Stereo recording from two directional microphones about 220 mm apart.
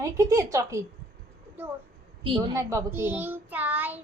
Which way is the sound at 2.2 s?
15° right (ahead or behind).